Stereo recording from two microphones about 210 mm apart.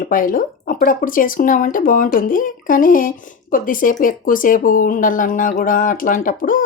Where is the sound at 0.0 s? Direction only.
40° left (ahead or behind).